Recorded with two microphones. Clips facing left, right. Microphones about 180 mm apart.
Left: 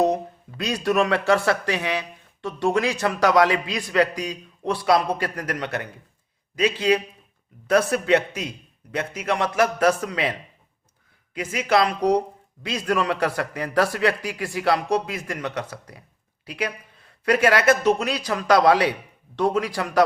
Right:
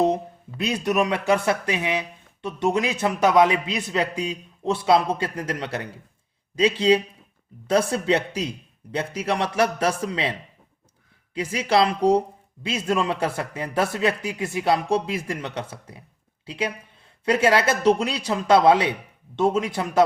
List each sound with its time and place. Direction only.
0.0 s speech: 25° right (ahead or behind)
11.3 s speech: 30° right (ahead or behind)